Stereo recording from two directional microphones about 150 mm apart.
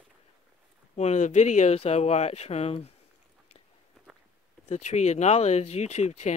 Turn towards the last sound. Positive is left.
turn(degrees=50)  # may be behind; listen again after turning